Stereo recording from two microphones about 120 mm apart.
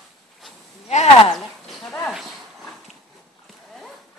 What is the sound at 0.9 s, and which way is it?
Speech, 65° left (ahead or behind).